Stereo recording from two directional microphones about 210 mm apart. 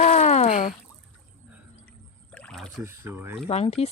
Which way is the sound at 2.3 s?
5° left (ahead or behind).